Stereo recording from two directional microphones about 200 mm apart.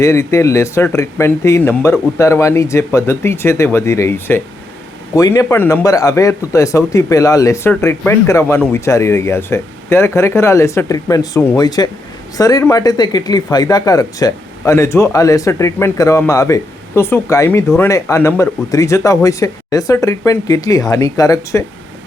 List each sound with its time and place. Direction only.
0.0 s speech: 15° left (ahead or behind)